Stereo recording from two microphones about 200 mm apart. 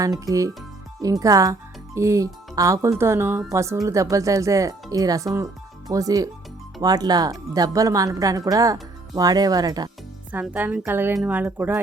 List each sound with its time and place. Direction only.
0.0 s a woman's voice: 15° right (ahead or behind)
10.3 s a woman's voice: 10° right (ahead or behind)